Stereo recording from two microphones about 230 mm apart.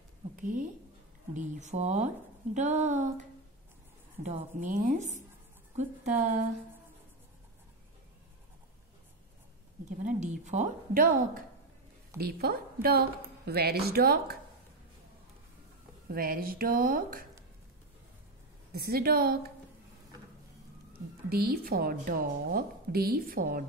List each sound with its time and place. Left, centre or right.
0.4 s a woman's voice: right
4.2 s a woman's voice: right
9.8 s a woman's voice: right
16.1 s a woman's voice: right
18.7 s a woman's voice: right
21.3 s a woman's voice: right